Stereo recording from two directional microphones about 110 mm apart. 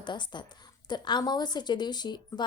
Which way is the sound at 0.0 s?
45° left (ahead or behind).